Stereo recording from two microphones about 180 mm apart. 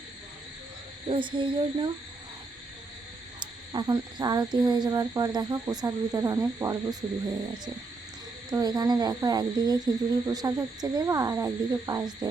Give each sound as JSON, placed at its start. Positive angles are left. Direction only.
{"t": 1.1, "sound": "speech", "side_deg": -25}
{"t": 3.4, "sound": "speech", "side_deg": -25}
{"t": 8.4, "sound": "speech", "side_deg": -20}